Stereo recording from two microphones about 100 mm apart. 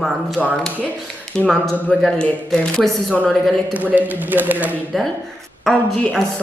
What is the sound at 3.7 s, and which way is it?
Speech, 15° right (ahead or behind).